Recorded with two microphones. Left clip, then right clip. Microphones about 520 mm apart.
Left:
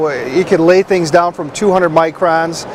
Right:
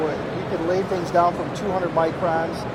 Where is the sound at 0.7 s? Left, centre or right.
Left.